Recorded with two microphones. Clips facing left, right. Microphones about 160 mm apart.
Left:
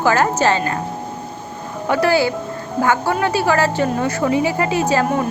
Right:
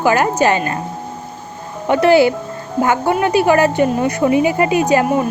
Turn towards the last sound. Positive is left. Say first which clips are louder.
# right 3 dB
turn(degrees=-15)  # may be behind; listen again after turning